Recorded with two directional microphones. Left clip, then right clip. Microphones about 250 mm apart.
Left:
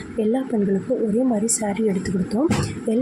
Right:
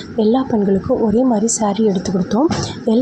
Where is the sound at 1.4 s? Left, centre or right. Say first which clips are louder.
Right 6 dB; centre.